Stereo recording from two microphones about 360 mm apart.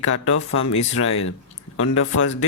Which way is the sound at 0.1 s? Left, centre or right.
Left.